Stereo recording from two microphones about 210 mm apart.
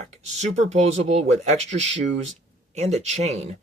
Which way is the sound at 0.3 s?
30° right (ahead or behind).